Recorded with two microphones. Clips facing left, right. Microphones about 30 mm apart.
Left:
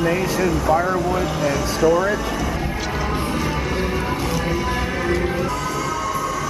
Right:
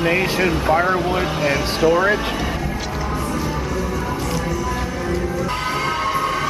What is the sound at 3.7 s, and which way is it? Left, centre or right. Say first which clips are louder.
Music: left 1 dB; left.